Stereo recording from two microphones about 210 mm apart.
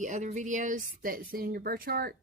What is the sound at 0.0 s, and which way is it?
Speech, 35° right (ahead or behind).